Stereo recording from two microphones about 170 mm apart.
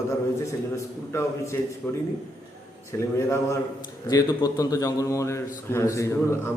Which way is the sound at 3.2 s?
15° left (ahead or behind).